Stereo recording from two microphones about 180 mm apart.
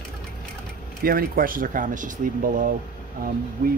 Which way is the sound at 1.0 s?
55° right (ahead or behind).